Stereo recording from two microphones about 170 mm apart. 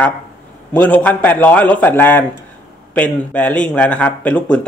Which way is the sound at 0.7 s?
10° left (ahead or behind).